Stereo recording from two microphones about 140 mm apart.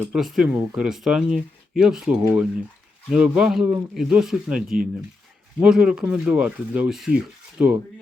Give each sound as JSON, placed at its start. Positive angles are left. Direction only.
{"t": 0.1, "sound": "speech", "side_deg": 0}
{"t": 0.4, "sound": "speech", "side_deg": -15}
{"t": 0.8, "sound": "speech", "side_deg": 0}